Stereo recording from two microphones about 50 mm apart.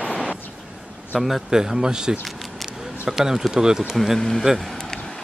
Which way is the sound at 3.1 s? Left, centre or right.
Centre.